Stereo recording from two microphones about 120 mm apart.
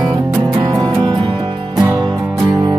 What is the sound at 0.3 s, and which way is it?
Music, 30° right (ahead or behind).